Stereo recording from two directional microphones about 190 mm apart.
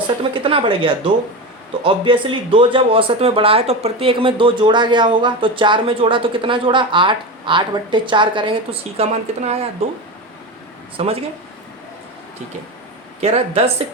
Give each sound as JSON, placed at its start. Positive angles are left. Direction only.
{"t": 0.2, "sound": "speech", "side_deg": -30}
{"t": 10.9, "sound": "speech", "side_deg": -30}
{"t": 13.2, "sound": "speech", "side_deg": -30}